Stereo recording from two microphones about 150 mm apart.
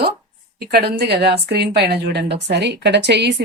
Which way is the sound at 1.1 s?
90° right.